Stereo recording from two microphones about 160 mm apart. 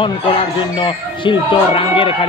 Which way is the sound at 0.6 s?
30° left (ahead or behind).